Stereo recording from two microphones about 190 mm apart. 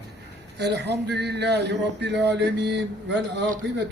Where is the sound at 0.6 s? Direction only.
60° right (ahead or behind).